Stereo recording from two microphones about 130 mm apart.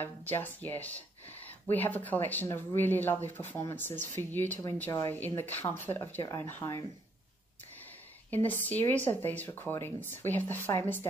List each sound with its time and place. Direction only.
0.0 s speech: 15° left (ahead or behind)
8.3 s speech: 15° left (ahead or behind)